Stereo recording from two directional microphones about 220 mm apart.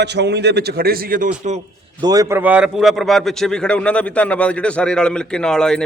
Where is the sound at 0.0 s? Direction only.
50° right (ahead or behind); by 1.6 s 35° right (ahead or behind).